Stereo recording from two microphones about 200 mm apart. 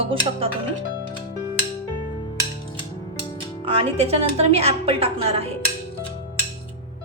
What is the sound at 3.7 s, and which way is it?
A woman's voice, 30° right (ahead or behind).